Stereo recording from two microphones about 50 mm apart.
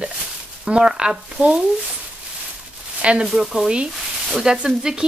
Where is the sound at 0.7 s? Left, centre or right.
Centre.